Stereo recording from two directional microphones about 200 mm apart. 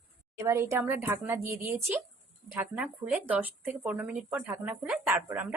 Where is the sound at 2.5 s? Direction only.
5° right (ahead or behind).